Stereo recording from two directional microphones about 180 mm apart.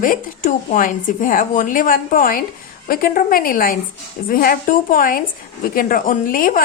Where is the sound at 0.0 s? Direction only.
45° left (ahead or behind).